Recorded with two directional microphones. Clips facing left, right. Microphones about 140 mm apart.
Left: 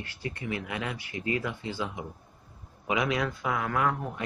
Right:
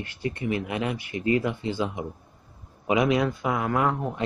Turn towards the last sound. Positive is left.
turn(degrees=-25)  # may be behind; listen again after turning